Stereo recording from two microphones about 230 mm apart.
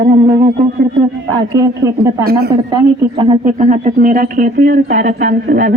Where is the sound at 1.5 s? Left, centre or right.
Centre.